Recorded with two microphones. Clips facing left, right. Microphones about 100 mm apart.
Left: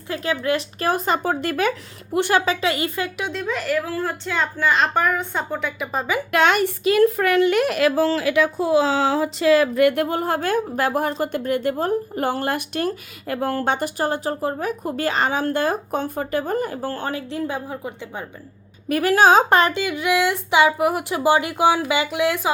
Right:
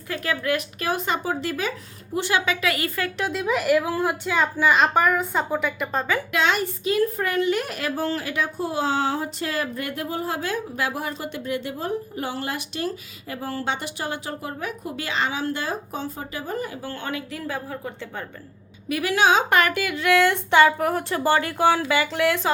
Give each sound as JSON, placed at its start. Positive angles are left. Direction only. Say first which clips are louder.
{"t": 0.1, "sound": "a woman's voice", "louder": "left 3 dB", "side_deg": 25}
{"t": 0.9, "sound": "a woman's voice", "louder": "left 4 dB", "side_deg": 40}
{"t": 2.4, "sound": "a woman's voice", "louder": "left 3 dB", "side_deg": 30}
{"t": 3.2, "sound": "a woman's voice", "louder": "right 2 dB", "side_deg": -5}
{"t": 6.3, "sound": "a woman's voice", "louder": "left 7 dB", "side_deg": 55}
{"t": 17.4, "sound": "a woman's voice", "louder": "left 3 dB", "side_deg": 20}
{"t": 18.9, "sound": "speech", "louder": "left 5 dB", "side_deg": 45}